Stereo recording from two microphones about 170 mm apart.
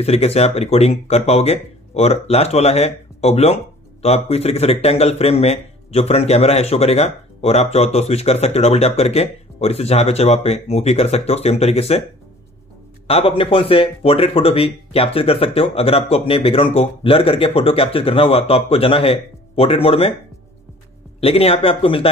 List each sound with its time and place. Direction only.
0.0 s a man's voice: 35° left (ahead or behind)
13.0 s a man's voice: 35° left (ahead or behind)
21.2 s a man's voice: 35° left (ahead or behind)